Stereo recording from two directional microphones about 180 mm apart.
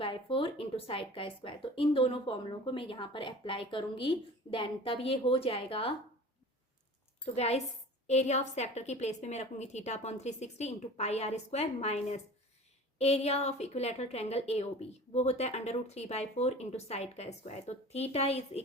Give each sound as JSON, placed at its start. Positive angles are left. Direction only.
{"t": 0.0, "sound": "speech", "side_deg": 30}
{"t": 7.3, "sound": "a woman's voice", "side_deg": 35}